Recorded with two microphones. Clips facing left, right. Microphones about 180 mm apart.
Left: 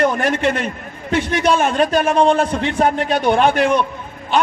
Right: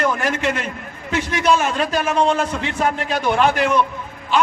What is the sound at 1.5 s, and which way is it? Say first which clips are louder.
A man's voice: left 5 dB; 55° left (ahead or behind).